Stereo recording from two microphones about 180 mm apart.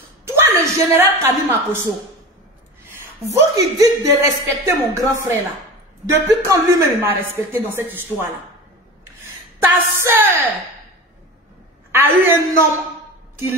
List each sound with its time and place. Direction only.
0.4 s a woman's voice: 15° right (ahead or behind)
3.3 s a woman's voice: 20° right (ahead or behind)
9.6 s a woman's voice: 10° right (ahead or behind)
11.9 s a woman's voice: 10° right (ahead or behind)